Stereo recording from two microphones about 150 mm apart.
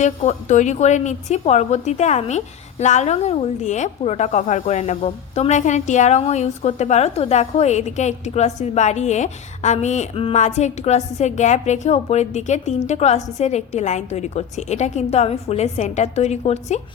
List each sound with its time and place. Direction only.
0.0 s speech: 50° left (ahead or behind)